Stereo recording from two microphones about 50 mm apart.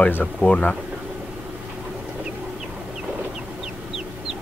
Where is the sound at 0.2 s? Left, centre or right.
Left.